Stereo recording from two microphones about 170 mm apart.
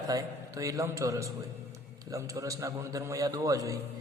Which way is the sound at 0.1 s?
20° right (ahead or behind).